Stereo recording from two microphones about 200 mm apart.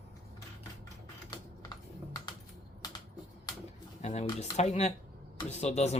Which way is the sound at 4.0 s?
35° left (ahead or behind).